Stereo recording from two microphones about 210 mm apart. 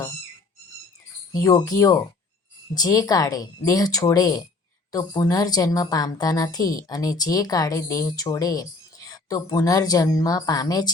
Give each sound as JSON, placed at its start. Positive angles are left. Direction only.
{"t": 1.3, "sound": "a woman's voice", "side_deg": 15}